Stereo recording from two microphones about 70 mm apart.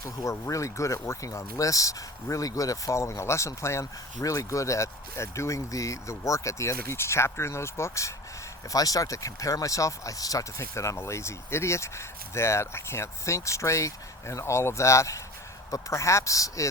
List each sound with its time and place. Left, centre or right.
0.0 s speech: left
8.7 s speech: left